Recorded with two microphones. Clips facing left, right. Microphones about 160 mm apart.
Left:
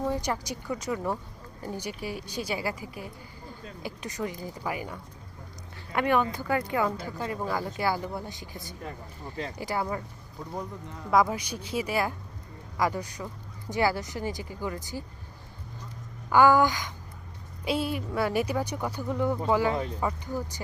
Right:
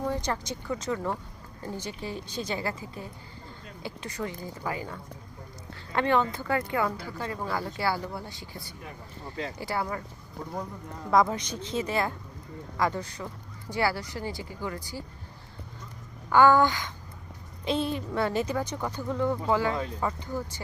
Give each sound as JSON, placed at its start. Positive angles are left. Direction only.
{"t": 0.0, "sound": "speech", "side_deg": 15}
{"t": 11.1, "sound": "speech", "side_deg": 5}
{"t": 16.3, "sound": "speech", "side_deg": 15}